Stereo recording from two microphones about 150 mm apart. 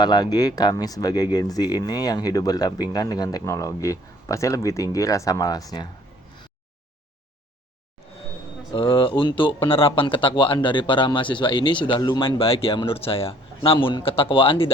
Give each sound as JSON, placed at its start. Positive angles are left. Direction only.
{"t": 0.0, "sound": "speech", "side_deg": 30}
{"t": 8.7, "sound": "speech", "side_deg": 35}